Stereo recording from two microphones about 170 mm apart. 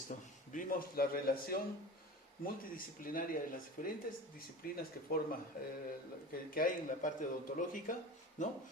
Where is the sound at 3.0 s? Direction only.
55° left (ahead or behind).